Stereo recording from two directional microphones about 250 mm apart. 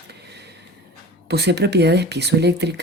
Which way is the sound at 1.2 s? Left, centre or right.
Right.